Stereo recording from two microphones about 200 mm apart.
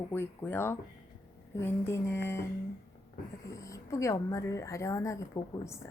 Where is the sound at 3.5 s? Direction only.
15° left (ahead or behind).